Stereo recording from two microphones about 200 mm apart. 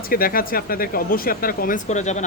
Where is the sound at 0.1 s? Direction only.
45° left (ahead or behind).